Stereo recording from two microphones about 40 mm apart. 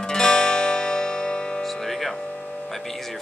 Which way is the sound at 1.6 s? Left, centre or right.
Centre.